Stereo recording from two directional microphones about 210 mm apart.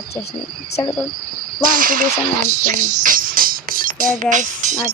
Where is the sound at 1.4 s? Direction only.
40° right (ahead or behind).